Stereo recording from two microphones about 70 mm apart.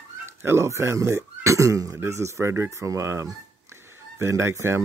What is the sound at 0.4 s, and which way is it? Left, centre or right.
Speech, right.